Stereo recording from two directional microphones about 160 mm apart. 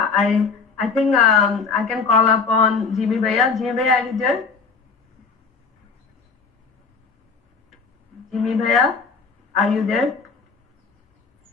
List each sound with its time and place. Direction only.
0.0 s a woman's voice: centre (ahead or behind)
8.3 s a woman's voice: centre (ahead or behind)